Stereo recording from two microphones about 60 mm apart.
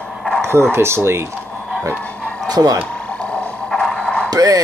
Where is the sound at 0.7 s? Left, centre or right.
Right.